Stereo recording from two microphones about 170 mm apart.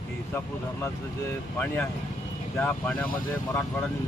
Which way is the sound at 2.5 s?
10° left (ahead or behind).